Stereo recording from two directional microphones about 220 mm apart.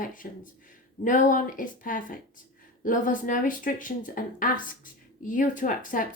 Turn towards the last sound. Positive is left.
turn(degrees=40)  # may be behind; listen again after turning